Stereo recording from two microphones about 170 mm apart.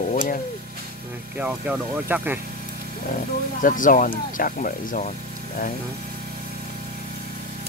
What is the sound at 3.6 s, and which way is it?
Speech, 50° left (ahead or behind).